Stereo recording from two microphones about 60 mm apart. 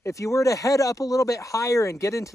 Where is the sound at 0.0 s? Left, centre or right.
Left.